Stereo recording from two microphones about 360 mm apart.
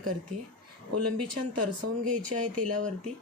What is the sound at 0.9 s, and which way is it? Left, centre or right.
Speech, right.